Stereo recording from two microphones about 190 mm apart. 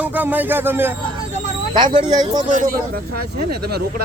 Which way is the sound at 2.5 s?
40° right (ahead or behind).